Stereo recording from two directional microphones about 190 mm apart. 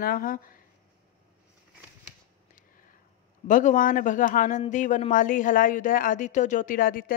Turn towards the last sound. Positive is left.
turn(degrees=50)  # may be behind; listen again after turning